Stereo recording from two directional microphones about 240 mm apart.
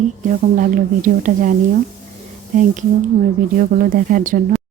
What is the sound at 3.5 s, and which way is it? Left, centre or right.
Speech, right.